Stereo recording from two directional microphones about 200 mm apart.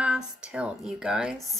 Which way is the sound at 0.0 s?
5° right (ahead or behind).